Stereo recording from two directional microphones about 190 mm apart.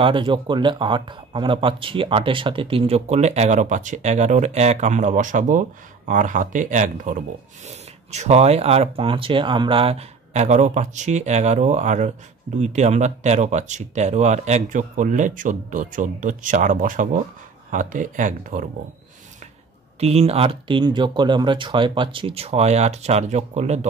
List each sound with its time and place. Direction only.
0.0 s speech: 25° right (ahead or behind); by 18.7 s 45° right (ahead or behind)
20.0 s speech: 35° right (ahead or behind)